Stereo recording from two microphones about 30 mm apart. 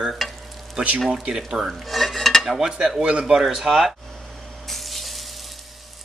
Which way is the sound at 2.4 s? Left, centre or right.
Centre.